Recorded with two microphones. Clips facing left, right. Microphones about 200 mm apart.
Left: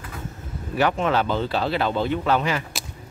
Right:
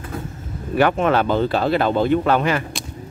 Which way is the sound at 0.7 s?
55° right (ahead or behind).